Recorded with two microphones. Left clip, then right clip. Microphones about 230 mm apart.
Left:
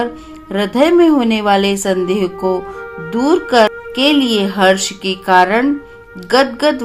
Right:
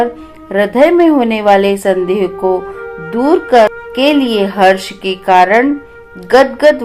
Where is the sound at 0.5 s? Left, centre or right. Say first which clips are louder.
Right 3 dB; left.